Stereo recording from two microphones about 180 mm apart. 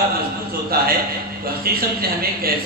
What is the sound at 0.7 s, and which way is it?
Speech, 60° right (ahead or behind).